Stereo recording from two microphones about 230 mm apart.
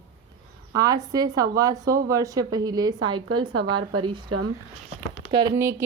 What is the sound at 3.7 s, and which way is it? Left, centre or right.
Speech, right.